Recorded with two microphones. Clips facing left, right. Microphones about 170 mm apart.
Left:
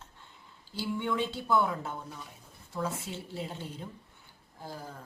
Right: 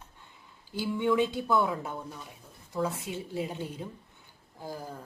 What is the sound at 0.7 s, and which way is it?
Speech, 15° right (ahead or behind).